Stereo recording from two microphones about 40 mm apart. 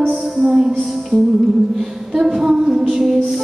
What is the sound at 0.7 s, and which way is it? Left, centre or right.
Music, centre.